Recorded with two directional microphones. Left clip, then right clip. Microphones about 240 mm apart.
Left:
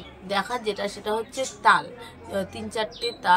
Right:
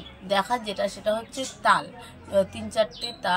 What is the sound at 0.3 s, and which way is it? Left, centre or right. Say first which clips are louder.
A woman's voice: right 1 dB; centre.